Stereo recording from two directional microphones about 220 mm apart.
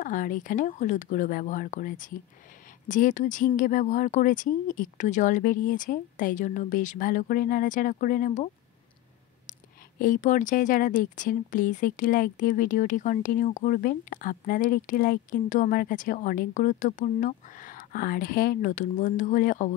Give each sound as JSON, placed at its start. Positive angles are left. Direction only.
{"t": 0.0, "sound": "speech", "side_deg": 35}
{"t": 9.5, "sound": "speech", "side_deg": 35}